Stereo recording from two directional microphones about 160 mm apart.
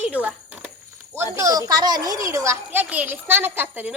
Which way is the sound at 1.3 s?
20° right (ahead or behind).